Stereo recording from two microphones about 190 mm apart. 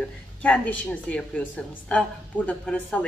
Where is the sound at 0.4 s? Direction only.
5° left (ahead or behind).